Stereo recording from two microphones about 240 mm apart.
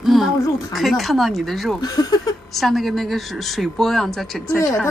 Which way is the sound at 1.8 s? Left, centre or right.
Centre.